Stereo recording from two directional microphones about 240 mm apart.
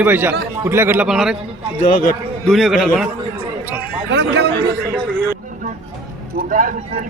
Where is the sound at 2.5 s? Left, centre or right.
Centre.